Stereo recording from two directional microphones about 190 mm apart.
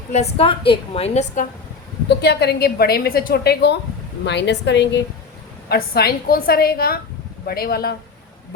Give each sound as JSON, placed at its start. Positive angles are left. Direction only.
{"t": 0.1, "sound": "a woman's voice", "side_deg": 35}
{"t": 2.0, "sound": "a woman's voice", "side_deg": 60}
{"t": 5.6, "sound": "a woman's voice", "side_deg": 55}